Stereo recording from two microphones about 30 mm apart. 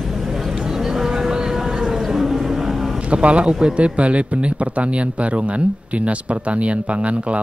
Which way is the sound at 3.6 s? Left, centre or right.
Right.